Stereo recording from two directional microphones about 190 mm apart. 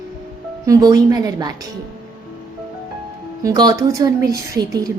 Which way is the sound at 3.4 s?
20° right (ahead or behind).